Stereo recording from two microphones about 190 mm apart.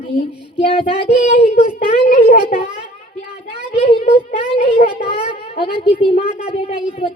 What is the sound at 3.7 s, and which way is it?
A woman's voice, 30° left (ahead or behind).